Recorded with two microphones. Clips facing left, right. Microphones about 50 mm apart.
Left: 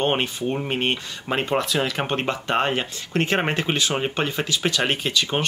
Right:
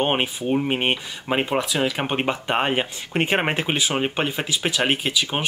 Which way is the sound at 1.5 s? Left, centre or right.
Centre.